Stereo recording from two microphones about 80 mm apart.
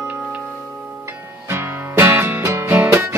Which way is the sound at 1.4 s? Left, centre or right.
Right.